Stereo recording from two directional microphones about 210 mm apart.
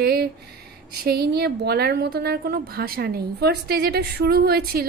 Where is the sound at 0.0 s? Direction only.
50° right (ahead or behind).